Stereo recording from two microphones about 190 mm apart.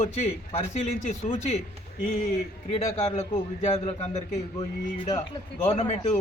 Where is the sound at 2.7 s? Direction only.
30° left (ahead or behind).